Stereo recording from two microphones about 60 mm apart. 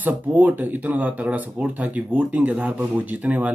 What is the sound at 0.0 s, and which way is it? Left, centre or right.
Speech, right.